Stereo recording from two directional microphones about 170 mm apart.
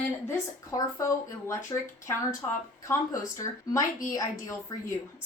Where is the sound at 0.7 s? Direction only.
20° left (ahead or behind).